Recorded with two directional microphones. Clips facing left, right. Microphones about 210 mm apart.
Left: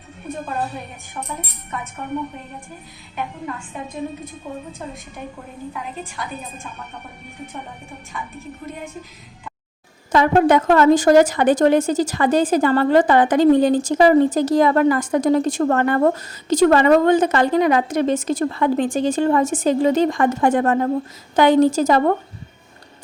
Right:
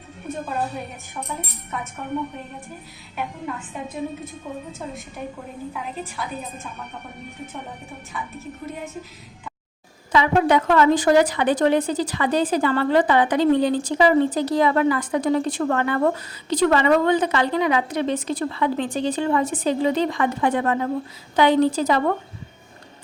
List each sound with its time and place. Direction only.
3.2 s a woman's voice: 5° right (ahead or behind)
5.7 s a woman's voice: centre (ahead or behind)
8.6 s a woman's voice: 5° right (ahead or behind)
10.1 s a woman's voice: 45° left (ahead or behind)